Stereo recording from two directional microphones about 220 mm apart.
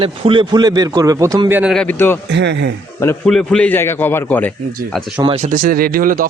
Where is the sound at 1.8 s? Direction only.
10° left (ahead or behind).